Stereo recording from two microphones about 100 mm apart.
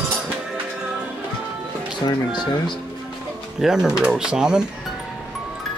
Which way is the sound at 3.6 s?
5° right (ahead or behind).